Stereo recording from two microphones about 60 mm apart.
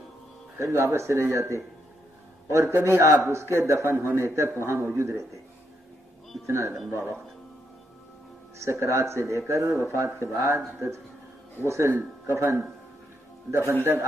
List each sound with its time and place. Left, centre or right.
0.6 s a man's voice: right
6.4 s a man's voice: right
8.5 s a man's voice: right
11.6 s a man's voice: right
11.9 s a man's voice: right